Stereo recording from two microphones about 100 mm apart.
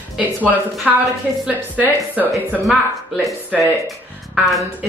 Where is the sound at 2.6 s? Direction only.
Centre (ahead or behind).